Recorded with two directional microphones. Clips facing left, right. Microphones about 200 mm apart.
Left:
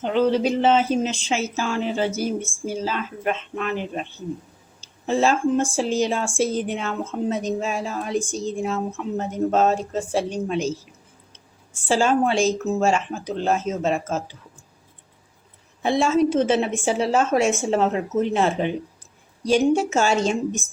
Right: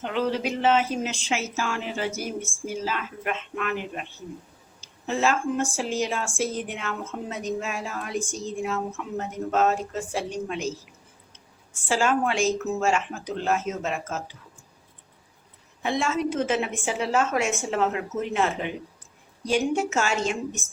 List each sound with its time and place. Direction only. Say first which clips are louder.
0.0 s a woman's voice: left 7 dB; 30° left (ahead or behind)
5.0 s a woman's voice: left 5 dB; 30° left (ahead or behind)
11.9 s a woman's voice: left 4 dB; 30° left (ahead or behind)
15.8 s a woman's voice: left 7 dB; 30° left (ahead or behind)